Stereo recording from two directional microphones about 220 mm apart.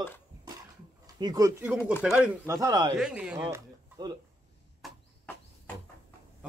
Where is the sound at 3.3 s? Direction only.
20° right (ahead or behind).